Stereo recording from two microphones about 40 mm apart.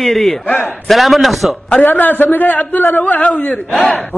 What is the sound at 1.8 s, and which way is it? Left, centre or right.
A man's voice, left.